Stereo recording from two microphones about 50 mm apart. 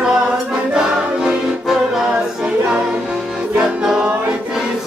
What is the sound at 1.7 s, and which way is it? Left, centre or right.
Music, centre.